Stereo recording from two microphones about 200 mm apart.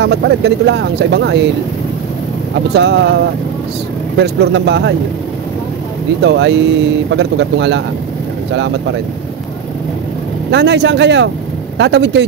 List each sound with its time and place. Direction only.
0.0 s speech: 60° right (ahead or behind)
2.7 s speech: 60° right (ahead or behind)
4.2 s speech: 55° right (ahead or behind)
6.2 s speech: 60° right (ahead or behind)
10.5 s speech: 60° right (ahead or behind)